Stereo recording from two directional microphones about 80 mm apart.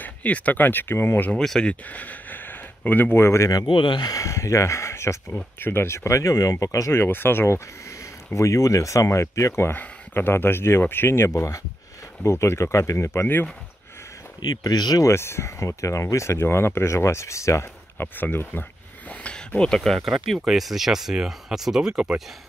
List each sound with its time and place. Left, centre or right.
0.0 s speech: left
1.3 s speech: centre; by 3.5 s left
3.6 s speech: left
4.1 s speech: left
6.9 s speech: left
9.7 s speech: left
14.4 s speech: left
15.0 s speech: left
18.0 s speech: left; by 22.2 s centre